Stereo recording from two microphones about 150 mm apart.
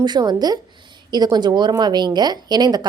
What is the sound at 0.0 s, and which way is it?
A woman's voice, 30° right (ahead or behind).